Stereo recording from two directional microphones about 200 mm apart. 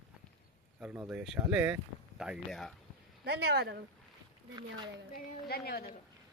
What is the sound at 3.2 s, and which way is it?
Speech, 55° right (ahead or behind).